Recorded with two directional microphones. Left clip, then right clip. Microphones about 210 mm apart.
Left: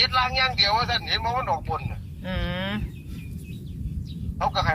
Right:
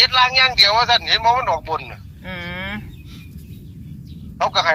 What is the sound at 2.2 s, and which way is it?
Vehicle, 10° left (ahead or behind).